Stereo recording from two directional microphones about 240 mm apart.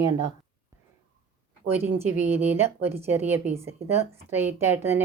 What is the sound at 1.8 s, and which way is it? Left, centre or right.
A woman's voice, centre.